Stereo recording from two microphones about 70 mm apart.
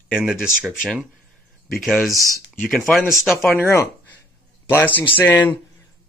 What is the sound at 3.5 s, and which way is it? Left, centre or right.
Speech, left.